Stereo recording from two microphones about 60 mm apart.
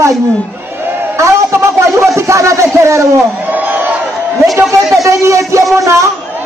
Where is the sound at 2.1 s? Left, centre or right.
Right.